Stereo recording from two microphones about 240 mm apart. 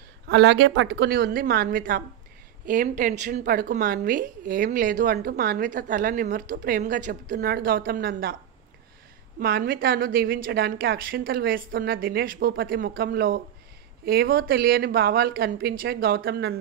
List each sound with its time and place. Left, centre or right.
0.3 s a woman's voice: right
9.4 s a woman's voice: right